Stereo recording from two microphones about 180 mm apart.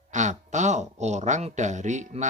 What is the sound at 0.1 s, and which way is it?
Speech, 40° right (ahead or behind).